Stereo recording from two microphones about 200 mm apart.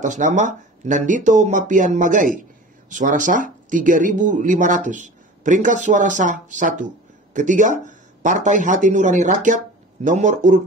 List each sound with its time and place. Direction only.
0.0 s speech: 40° right (ahead or behind)